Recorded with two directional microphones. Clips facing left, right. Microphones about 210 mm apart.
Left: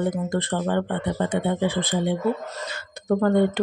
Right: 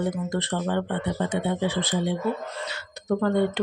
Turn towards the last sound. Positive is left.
turn(degrees=50)  # may be behind; listen again after turning